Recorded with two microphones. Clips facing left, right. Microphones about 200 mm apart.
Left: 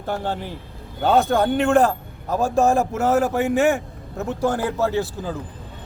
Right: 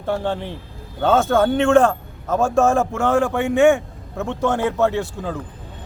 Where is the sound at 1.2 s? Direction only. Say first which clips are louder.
Right 3 dB; 15° left (ahead or behind).